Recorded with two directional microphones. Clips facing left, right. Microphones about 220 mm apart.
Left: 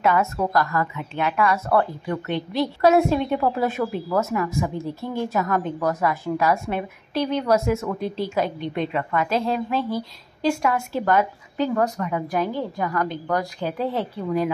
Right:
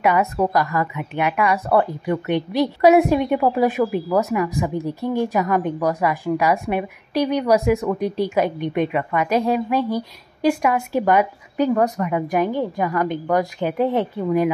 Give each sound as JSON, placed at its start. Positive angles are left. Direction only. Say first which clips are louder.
{"t": 0.0, "sound": "speech", "louder": "right 3 dB", "side_deg": -15}